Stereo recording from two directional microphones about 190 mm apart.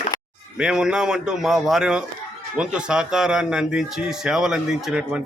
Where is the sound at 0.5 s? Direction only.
5° right (ahead or behind).